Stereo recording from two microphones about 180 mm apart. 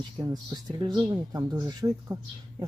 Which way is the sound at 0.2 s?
20° right (ahead or behind).